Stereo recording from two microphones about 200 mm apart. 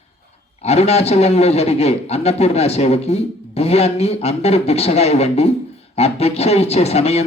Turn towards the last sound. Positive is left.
turn(degrees=30)  # may be behind; listen again after turning